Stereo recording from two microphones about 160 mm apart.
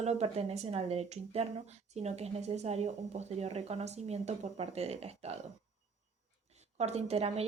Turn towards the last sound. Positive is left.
turn(degrees=-40)  # may be behind; listen again after turning